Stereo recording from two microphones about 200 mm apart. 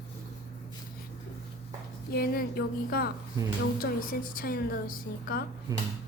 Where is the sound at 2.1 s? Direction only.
50° left (ahead or behind).